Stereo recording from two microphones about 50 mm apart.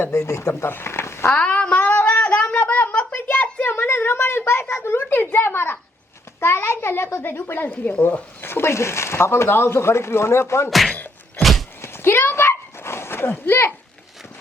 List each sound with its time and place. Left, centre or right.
0.3 s speech: left
0.7 s speech: left
1.4 s a sound: left
5.1 s speech: left
6.4 s speech: left
7.6 s speech: left
8.4 s speech: left
10.7 s speech: centre
10.9 s a sound: left
11.8 s a sound: left